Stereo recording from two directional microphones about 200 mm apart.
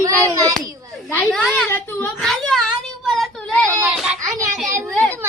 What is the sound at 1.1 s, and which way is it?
A woman's voice, 5° left (ahead or behind).